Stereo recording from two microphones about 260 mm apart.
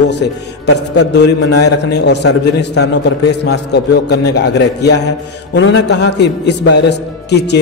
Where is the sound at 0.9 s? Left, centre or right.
Left.